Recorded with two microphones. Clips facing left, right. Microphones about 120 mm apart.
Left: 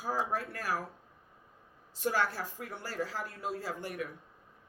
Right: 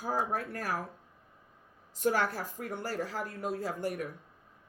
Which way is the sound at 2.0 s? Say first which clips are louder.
Right 2 dB; 50° right (ahead or behind).